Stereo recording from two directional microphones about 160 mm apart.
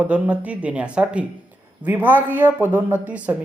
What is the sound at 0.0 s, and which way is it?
Speech, 10° right (ahead or behind).